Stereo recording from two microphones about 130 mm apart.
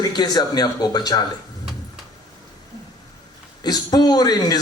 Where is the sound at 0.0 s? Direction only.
30° left (ahead or behind).